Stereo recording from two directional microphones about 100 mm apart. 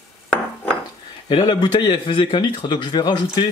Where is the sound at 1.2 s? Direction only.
50° left (ahead or behind).